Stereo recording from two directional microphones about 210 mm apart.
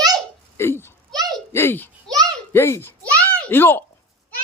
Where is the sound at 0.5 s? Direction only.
10° left (ahead or behind).